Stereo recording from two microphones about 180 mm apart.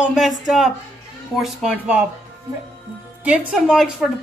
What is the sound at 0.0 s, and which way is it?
Speech, centre (ahead or behind).